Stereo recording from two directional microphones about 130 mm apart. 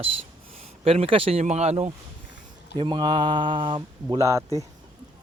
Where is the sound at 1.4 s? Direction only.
60° right (ahead or behind).